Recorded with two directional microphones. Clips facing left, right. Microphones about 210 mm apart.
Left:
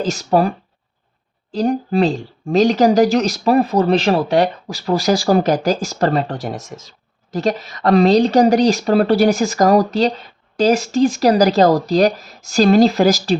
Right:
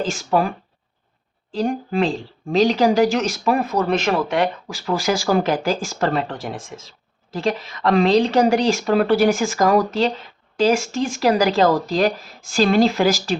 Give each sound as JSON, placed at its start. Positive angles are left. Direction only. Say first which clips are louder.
{"t": 0.0, "sound": "a woman's voice", "louder": "left 4 dB", "side_deg": 40}
{"t": 1.5, "sound": "a woman's voice", "louder": "left 4 dB", "side_deg": 40}